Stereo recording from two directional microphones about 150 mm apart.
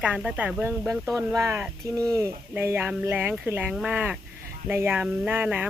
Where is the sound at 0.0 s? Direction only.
5° right (ahead or behind).